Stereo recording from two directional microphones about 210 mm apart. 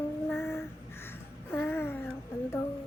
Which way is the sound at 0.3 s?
10° left (ahead or behind).